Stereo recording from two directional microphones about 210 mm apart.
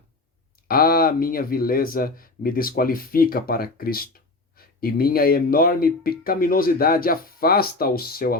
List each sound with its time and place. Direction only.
0.7 s speech: 45° left (ahead or behind)